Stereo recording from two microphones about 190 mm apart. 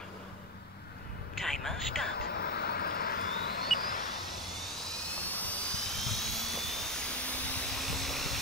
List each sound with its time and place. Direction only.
1.3 s a sound: centre (ahead or behind)
2.1 s vehicle: 55° left (ahead or behind)
5.1 s helicopter: 10° left (ahead or behind)